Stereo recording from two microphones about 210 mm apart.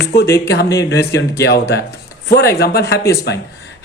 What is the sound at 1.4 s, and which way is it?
Speech, 50° left (ahead or behind).